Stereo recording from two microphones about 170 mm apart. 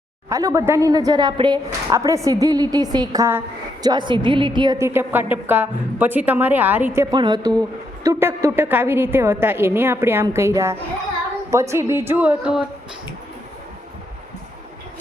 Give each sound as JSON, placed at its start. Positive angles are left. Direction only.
{"t": 0.3, "sound": "a woman's voice", "side_deg": -20}